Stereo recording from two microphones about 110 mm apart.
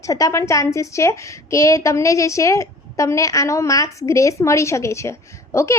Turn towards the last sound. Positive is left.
turn(degrees=25)  # may be behind; listen again after turning